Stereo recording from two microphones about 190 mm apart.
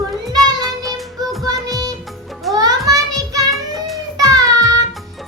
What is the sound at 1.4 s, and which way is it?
Music, 20° right (ahead or behind).